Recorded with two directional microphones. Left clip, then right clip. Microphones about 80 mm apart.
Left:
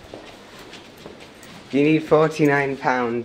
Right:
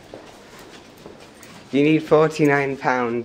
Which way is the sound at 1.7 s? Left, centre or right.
Right.